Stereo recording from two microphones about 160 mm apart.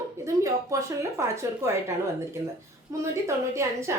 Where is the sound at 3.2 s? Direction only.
15° right (ahead or behind).